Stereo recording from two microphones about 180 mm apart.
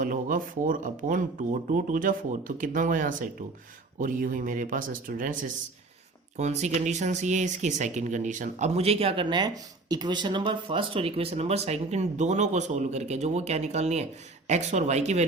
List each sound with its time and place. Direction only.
0.0 s speech: 50° right (ahead or behind)